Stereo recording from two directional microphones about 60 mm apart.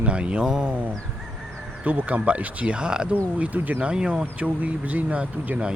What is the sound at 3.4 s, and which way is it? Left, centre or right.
Speech, right.